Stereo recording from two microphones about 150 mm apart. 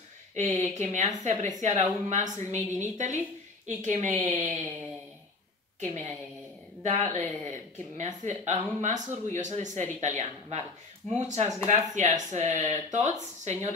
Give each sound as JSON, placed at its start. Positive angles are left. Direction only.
{"t": 0.4, "sound": "a woman's voice", "side_deg": -50}
{"t": 5.8, "sound": "speech", "side_deg": -50}